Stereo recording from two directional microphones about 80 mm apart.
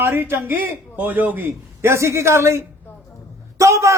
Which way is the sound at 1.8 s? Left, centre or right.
Right.